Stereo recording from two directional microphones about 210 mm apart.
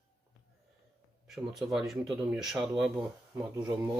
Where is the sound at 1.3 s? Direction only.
Centre (ahead or behind).